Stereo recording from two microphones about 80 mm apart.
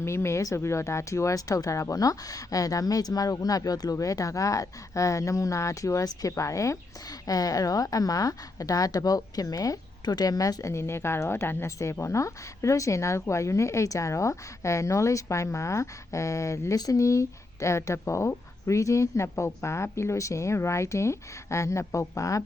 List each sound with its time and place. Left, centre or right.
0.0 s speech: left